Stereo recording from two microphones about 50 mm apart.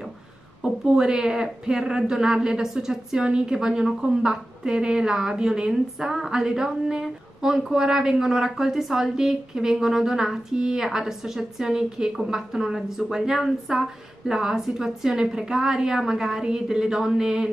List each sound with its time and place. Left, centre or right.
0.6 s a woman's voice: centre